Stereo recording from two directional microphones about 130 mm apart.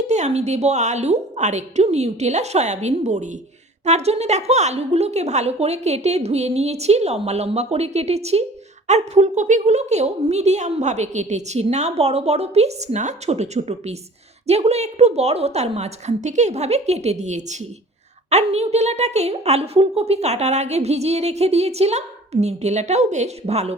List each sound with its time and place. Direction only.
0.1 s a woman's voice: 60° right (ahead or behind)